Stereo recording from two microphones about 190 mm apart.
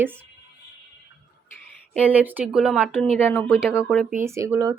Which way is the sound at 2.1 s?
10° right (ahead or behind).